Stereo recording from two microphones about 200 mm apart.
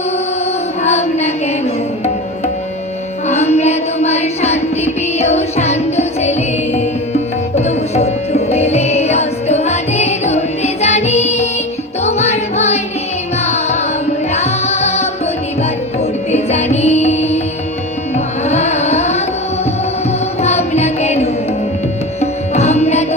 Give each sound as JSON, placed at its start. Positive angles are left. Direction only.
{"t": 0.9, "sound": "child singing", "side_deg": 35}
{"t": 3.2, "sound": "music", "side_deg": 35}
{"t": 16.3, "sound": "music", "side_deg": 35}
{"t": 18.4, "sound": "carnatic music", "side_deg": 35}
{"t": 20.4, "sound": "carnatic music", "side_deg": 35}
{"t": 22.2, "sound": "music", "side_deg": 35}